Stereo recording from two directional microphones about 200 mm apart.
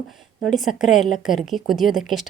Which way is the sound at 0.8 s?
Centre (ahead or behind).